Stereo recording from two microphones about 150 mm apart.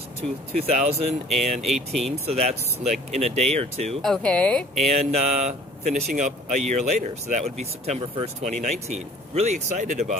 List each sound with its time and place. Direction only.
0.2 s speech: 45° right (ahead or behind)
1.6 s speech: centre (ahead or behind)
2.2 s speech: 45° right (ahead or behind)
4.0 s speech: 5° left (ahead or behind)
4.8 s speech: 45° right (ahead or behind)